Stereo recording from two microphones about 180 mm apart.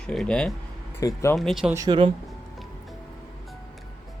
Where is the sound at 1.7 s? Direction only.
20° right (ahead or behind).